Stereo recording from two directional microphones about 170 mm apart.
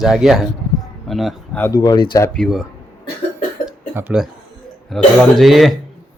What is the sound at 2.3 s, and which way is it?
Speech, centre (ahead or behind).